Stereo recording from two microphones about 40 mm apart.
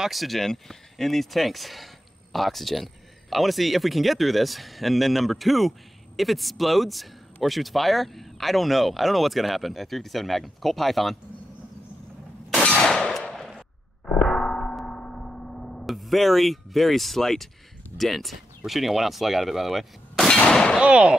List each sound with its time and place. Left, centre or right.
0.0 s speech: centre
13.3 s a sound: centre
17.9 s speech: centre
20.4 s gunshot: centre
20.8 s speech: right